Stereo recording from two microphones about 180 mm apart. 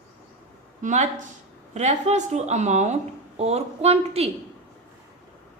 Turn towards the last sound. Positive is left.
turn(degrees=-35)  # may be behind; listen again after turning